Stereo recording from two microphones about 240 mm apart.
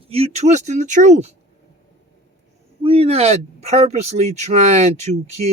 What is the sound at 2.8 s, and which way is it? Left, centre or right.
Speech, right.